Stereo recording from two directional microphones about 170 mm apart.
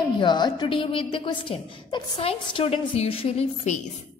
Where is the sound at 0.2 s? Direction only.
25° left (ahead or behind).